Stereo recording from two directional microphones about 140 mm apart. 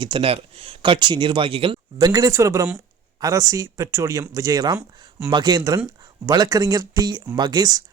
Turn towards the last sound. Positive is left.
turn(degrees=-25)  # may be behind; listen again after turning